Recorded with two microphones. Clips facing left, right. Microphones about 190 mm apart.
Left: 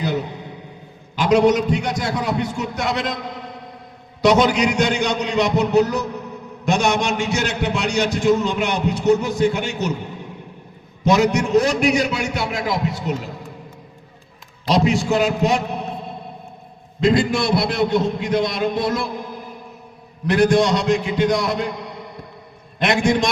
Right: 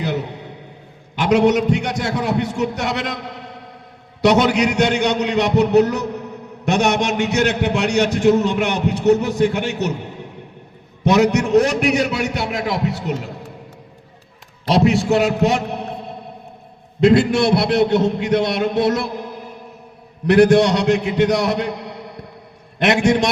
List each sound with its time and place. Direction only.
1.1 s a man's voice: 65° right (ahead or behind)
4.2 s a man's voice: 65° right (ahead or behind)
11.0 s a man's voice: 65° right (ahead or behind)
14.7 s a man's voice: 65° right (ahead or behind)
17.0 s a man's voice: 65° right (ahead or behind)
20.2 s a man's voice: 65° right (ahead or behind)